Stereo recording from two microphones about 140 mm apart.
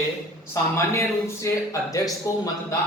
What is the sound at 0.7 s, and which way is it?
A man's voice, 20° left (ahead or behind).